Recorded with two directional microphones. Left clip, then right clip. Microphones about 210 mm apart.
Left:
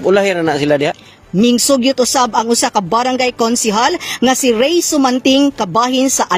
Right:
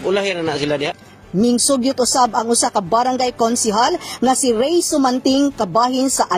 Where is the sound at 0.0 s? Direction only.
55° left (ahead or behind).